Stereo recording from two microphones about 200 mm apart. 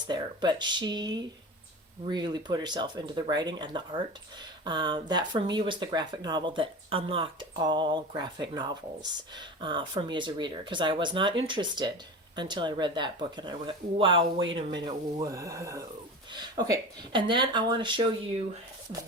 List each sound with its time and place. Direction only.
0.1 s speech: 20° right (ahead or behind)